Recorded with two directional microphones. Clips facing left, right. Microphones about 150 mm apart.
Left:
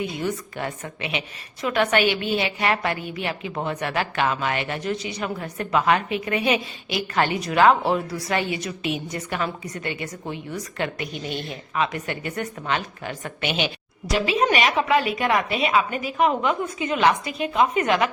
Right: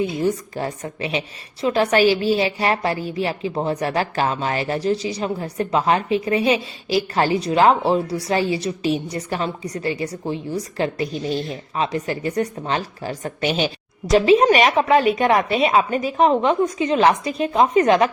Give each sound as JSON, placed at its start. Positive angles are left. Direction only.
{"t": 0.0, "sound": "a woman's voice", "side_deg": -35}